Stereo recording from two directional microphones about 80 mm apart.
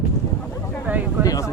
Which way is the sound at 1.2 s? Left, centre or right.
Left.